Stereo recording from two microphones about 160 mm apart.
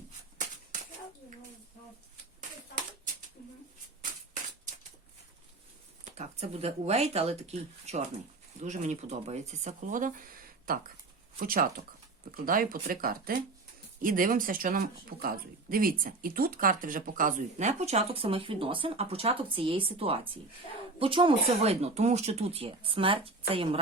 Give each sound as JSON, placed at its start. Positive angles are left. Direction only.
{"t": 6.1, "sound": "speech", "side_deg": -45}